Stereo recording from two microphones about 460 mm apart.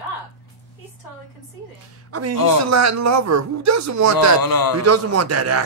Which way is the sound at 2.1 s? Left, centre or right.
Right.